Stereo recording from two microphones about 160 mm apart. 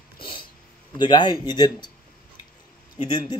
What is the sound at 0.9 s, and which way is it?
Speech, 30° left (ahead or behind).